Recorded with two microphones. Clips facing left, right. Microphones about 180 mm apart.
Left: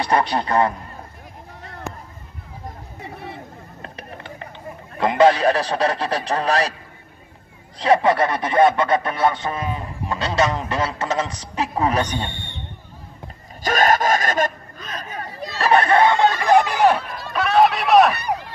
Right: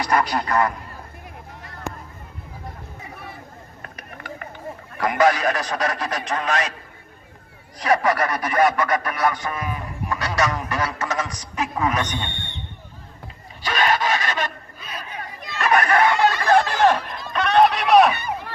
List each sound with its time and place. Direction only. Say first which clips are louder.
0.0 s speech: left 2 dB; 25° left (ahead or behind)
3.0 s a sound: left 7 dB; 30° left (ahead or behind)
3.8 s mechanisms: left 3 dB; 30° left (ahead or behind)
4.9 s a man's voice: left 4 dB; 25° left (ahead or behind)
7.8 s speech: left 3 dB; 25° left (ahead or behind)
13.6 s a sound: left 4 dB; 45° left (ahead or behind)
14.8 s chatter: left 3 dB; 10° right (ahead or behind)
15.0 s chatter: left 4 dB; 35° left (ahead or behind); by 18.1 s centre (ahead or behind)
18.1 s a sound: left 3 dB; 80° left